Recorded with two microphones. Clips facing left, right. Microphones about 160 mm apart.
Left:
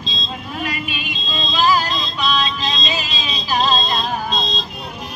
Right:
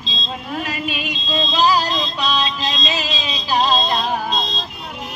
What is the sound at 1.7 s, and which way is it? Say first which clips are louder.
Music: even; 35° right (ahead or behind).